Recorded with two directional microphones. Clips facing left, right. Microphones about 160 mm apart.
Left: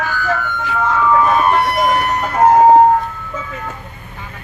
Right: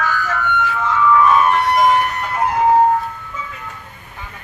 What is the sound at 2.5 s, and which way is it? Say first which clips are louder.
Siren: left 5 dB; 40° left (ahead or behind).